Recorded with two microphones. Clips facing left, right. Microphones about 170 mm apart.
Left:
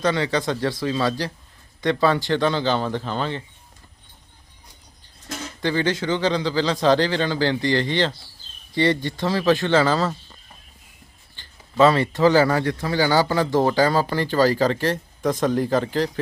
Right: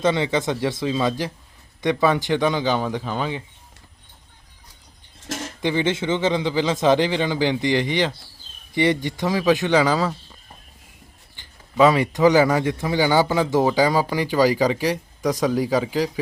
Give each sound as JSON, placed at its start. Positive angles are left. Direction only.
{"t": 0.0, "sound": "speech", "side_deg": -20}
{"t": 5.6, "sound": "speech", "side_deg": -20}
{"t": 11.3, "sound": "speech", "side_deg": -15}